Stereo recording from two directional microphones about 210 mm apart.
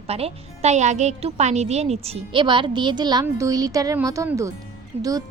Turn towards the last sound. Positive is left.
turn(degrees=-15)  # may be behind; listen again after turning